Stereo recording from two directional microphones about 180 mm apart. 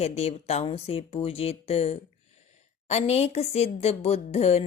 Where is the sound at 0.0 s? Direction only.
35° left (ahead or behind).